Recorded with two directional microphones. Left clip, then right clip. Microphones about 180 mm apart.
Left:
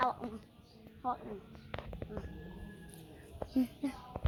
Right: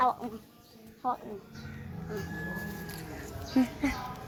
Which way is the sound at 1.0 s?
50° left (ahead or behind).